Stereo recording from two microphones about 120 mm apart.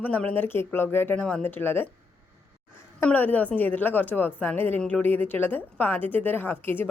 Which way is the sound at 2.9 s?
15° left (ahead or behind).